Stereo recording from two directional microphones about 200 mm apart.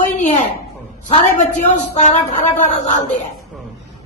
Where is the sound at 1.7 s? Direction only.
35° left (ahead or behind).